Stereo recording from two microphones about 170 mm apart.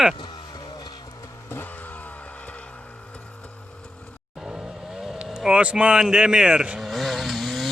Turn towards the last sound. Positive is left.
turn(degrees=0)  # may be behind; listen again after turning